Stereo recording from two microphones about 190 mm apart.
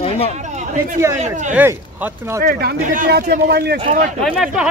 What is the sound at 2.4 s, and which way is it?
Speech, 55° right (ahead or behind).